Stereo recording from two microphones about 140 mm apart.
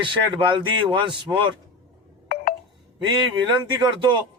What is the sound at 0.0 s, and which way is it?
A man's voice, 35° right (ahead or behind).